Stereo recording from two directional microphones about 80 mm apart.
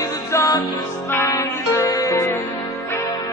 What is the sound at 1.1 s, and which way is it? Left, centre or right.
Music, left.